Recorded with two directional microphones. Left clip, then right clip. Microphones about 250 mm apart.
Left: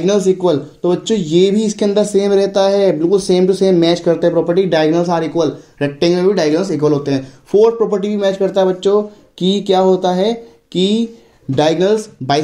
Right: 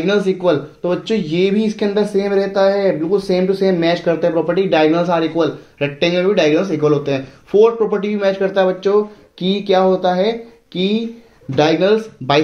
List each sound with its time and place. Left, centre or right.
0.0 s speech: left